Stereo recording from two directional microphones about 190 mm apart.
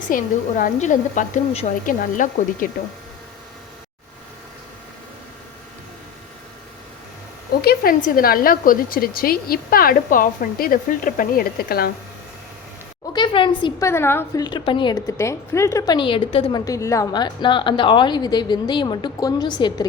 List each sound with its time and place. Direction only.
0.1 s a woman's voice: 45° left (ahead or behind)
7.6 s a woman's voice: 55° left (ahead or behind)
13.1 s a woman's voice: 25° left (ahead or behind)
14.4 s a woman's voice: 25° left (ahead or behind)